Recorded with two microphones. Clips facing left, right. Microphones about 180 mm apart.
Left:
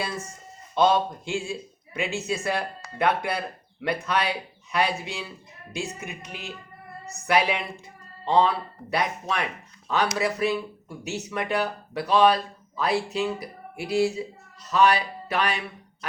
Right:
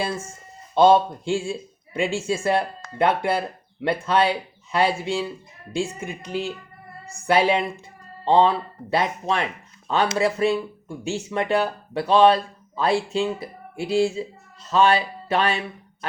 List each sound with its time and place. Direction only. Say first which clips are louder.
0.8 s speech: right 5 dB; 30° right (ahead or behind)